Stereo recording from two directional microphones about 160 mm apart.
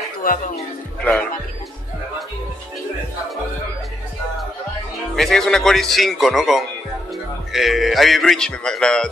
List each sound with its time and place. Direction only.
0.2 s speech: 65° left (ahead or behind)
5.1 s a man's voice: 5° left (ahead or behind)